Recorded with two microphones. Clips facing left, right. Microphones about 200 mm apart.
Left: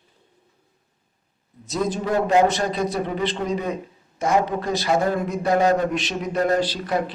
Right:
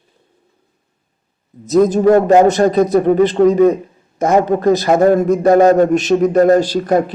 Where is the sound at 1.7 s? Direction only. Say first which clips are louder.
Right 13 dB; 45° right (ahead or behind).